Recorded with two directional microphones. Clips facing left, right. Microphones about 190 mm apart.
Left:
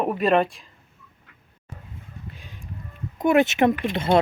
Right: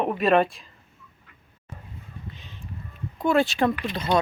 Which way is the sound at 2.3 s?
10° left (ahead or behind).